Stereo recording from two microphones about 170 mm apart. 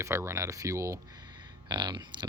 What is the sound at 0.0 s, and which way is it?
Speech, 15° right (ahead or behind).